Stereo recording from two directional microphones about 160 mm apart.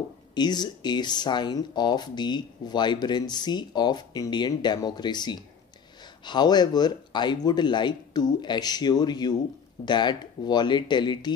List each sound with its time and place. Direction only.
0.3 s speech: 25° left (ahead or behind)